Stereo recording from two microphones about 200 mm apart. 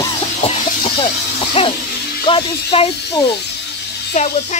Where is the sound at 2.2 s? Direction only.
25° left (ahead or behind).